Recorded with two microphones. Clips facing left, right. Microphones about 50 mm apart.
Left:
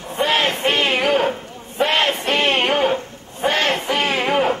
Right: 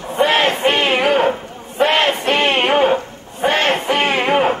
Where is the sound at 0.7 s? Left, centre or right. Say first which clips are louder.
Right 1 dB; centre.